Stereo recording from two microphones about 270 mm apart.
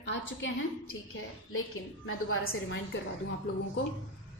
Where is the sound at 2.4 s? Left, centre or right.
Left.